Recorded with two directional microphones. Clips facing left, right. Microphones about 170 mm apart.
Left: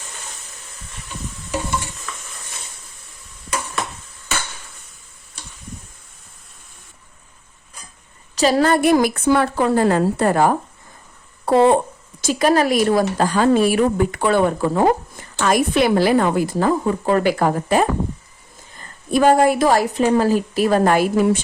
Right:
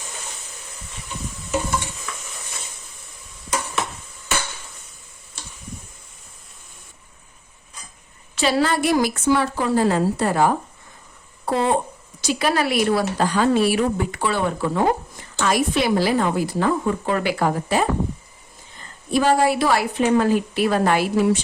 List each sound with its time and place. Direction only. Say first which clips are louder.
8.4 s a woman's voice: left 4 dB; 45° left (ahead or behind); by 11.7 s 60° left (ahead or behind)
12.2 s a woman's voice: left 5 dB; 45° left (ahead or behind)
16.6 s speech: left 2 dB; 40° left (ahead or behind)
19.1 s a woman's voice: left 4 dB; 50° left (ahead or behind)